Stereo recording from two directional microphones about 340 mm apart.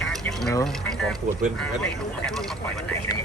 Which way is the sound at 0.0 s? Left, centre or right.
Centre.